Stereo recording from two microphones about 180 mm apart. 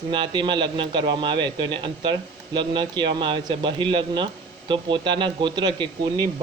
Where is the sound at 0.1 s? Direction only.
25° right (ahead or behind).